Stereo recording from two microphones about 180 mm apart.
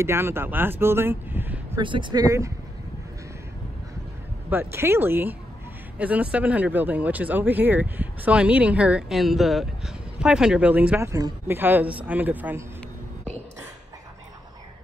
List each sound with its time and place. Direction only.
0.0 s speech: 15° right (ahead or behind)
1.8 s speech: 25° right (ahead or behind)
4.5 s speech: 15° right (ahead or behind)